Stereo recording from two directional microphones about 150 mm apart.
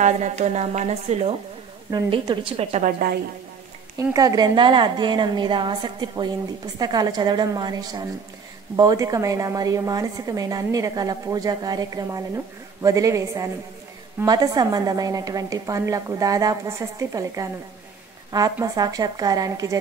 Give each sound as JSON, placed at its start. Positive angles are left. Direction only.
{"t": 0.0, "sound": "speech", "side_deg": -50}
{"t": 1.9, "sound": "a woman's voice", "side_deg": -30}
{"t": 2.8, "sound": "a woman's voice", "side_deg": -75}
{"t": 4.0, "sound": "a woman's voice", "side_deg": -25}